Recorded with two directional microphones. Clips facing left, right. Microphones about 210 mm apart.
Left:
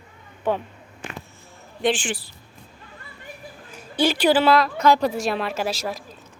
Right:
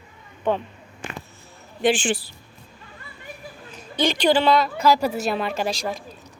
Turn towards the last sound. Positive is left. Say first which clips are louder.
# right 1 dB
turn(degrees=5)  # may be behind; listen again after turning